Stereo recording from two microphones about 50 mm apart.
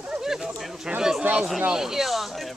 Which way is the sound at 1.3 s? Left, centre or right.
Right.